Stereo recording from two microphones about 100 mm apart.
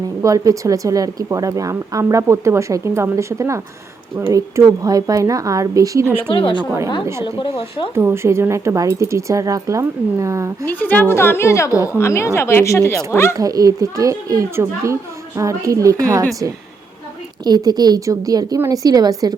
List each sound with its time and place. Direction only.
0.2 s speech: 35° right (ahead or behind)
6.3 s a woman's voice: 55° left (ahead or behind)
7.9 s speech: 25° right (ahead or behind)
10.7 s a woman's voice: 15° left (ahead or behind)
13.3 s speech: 35° right (ahead or behind)
17.4 s speech: 45° right (ahead or behind)